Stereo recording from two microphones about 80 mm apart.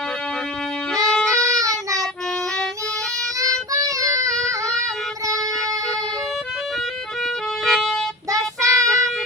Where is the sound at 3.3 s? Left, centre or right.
Right.